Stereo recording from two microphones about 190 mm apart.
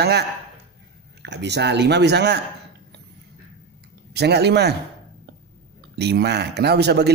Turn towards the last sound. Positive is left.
turn(degrees=-60)  # may be behind; listen again after turning